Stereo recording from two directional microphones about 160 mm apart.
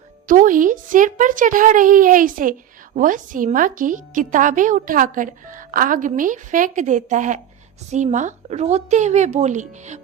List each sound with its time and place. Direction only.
0.3 s a woman's voice: 55° right (ahead or behind)